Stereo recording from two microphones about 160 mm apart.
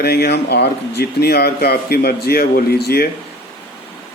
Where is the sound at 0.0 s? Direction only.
80° left.